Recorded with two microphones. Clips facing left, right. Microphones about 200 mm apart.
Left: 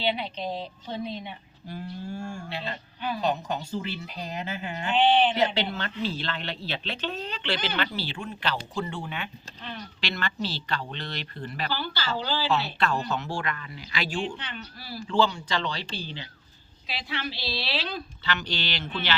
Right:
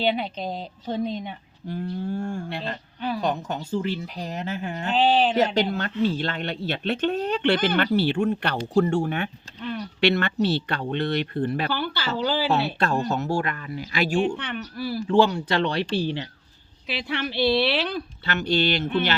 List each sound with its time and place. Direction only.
0.0 s speech: 45° right (ahead or behind)
2.1 s speech: 55° right (ahead or behind)
8.7 s speech: 45° right (ahead or behind)
14.3 s speech: 65° right (ahead or behind)
18.3 s speech: 50° right (ahead or behind)